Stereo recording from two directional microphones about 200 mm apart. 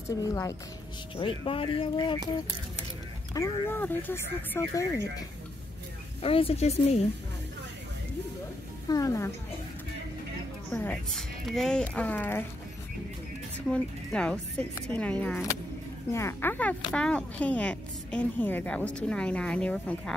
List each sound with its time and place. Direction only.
0.2 s speech: 15° left (ahead or behind)
1.4 s speech: 25° left (ahead or behind)
3.3 s speech: 15° left (ahead or behind)
6.2 s speech: 30° left (ahead or behind)
8.8 s speech: 15° left (ahead or behind)
10.7 s speech: 10° left (ahead or behind)
13.7 s a woman's voice: 5° left (ahead or behind)